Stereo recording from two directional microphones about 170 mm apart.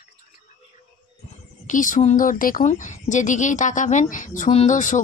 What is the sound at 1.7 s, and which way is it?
A woman's voice, 50° left (ahead or behind).